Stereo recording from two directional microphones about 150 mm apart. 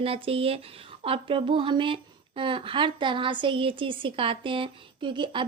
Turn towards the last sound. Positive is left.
turn(degrees=-30)  # may be behind; listen again after turning